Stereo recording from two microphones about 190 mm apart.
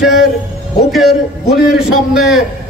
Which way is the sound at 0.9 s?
Centre (ahead or behind).